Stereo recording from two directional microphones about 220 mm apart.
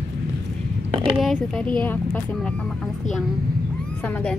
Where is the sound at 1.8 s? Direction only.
5° left (ahead or behind).